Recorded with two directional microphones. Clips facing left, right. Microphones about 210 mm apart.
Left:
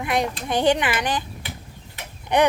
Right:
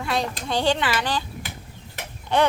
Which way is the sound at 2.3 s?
20° left (ahead or behind).